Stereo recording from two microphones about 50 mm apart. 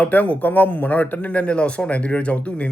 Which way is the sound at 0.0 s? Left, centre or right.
Left.